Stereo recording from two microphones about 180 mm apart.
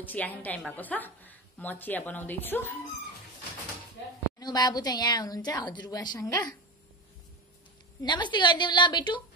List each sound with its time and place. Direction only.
0.0 s a woman's voice: 10° left (ahead or behind)
4.4 s a woman's voice: 20° left (ahead or behind)
8.0 s a woman's voice: 25° left (ahead or behind)